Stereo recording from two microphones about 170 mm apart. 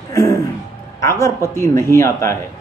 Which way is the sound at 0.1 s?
20° left (ahead or behind).